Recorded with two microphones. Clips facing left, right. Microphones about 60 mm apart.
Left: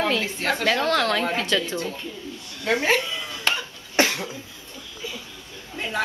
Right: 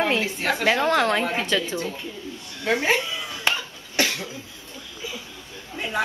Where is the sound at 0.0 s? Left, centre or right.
Centre.